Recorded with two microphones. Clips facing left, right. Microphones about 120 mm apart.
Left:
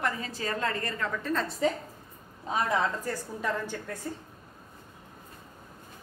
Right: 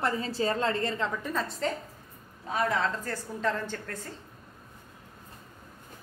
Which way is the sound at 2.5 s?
15° left (ahead or behind).